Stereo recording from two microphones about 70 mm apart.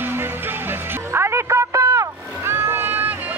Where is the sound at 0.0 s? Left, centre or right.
Right.